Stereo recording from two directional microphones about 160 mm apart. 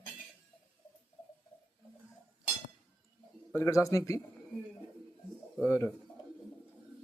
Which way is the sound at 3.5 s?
15° left (ahead or behind).